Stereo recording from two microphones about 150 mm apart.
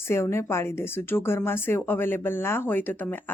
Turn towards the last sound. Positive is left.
turn(degrees=10)  # may be behind; listen again after turning